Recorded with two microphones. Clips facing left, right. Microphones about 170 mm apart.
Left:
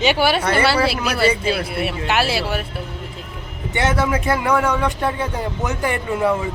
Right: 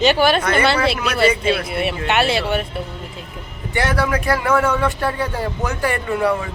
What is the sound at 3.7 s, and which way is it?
Speech, 20° left (ahead or behind).